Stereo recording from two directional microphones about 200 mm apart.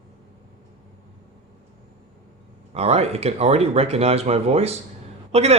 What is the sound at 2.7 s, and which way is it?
A man's voice, 30° right (ahead or behind).